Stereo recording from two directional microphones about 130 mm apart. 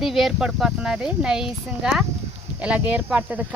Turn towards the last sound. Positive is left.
turn(degrees=-10)  # may be behind; listen again after turning